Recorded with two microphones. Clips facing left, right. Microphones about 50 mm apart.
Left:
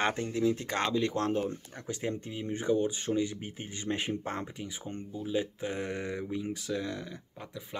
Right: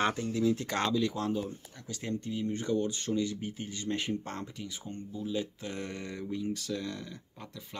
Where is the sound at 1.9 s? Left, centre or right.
Left.